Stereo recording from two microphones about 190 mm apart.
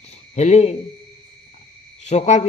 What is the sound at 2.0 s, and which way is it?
Speech, 35° left (ahead or behind).